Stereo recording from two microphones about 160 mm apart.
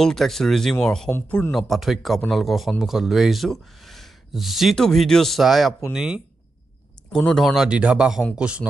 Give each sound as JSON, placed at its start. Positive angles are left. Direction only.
{"t": 0.0, "sound": "speech", "side_deg": 0}
{"t": 1.5, "sound": "speech", "side_deg": 0}